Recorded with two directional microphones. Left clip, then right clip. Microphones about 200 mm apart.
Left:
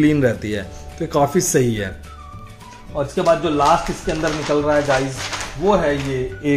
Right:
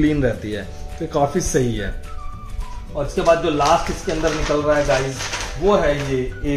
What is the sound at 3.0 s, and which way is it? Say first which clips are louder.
Speech: left 2 dB; 50° left (ahead or behind).